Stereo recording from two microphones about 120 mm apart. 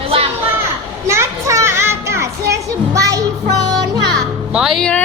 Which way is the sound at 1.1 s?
25° right (ahead or behind).